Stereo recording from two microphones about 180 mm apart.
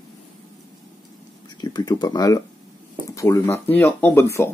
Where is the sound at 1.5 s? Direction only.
20° left (ahead or behind).